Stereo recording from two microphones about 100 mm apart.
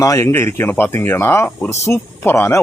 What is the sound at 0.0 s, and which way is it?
Speech, 30° left (ahead or behind).